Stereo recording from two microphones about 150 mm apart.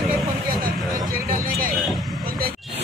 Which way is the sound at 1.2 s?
70° right (ahead or behind).